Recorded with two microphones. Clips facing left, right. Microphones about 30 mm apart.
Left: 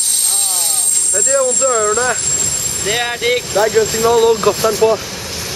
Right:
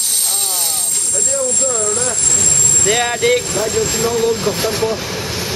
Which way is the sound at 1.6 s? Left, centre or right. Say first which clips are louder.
Left 5 dB; left.